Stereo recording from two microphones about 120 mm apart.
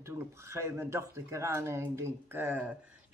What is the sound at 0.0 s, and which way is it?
Speech, 25° right (ahead or behind).